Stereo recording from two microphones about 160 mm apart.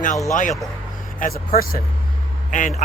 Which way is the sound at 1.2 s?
65° left (ahead or behind).